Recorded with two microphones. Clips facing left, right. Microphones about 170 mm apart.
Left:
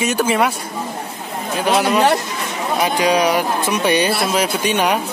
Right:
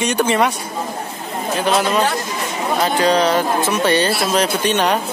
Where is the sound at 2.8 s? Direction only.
10° left (ahead or behind).